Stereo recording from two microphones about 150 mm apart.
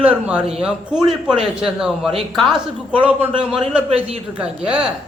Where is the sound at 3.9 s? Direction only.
45° right (ahead or behind).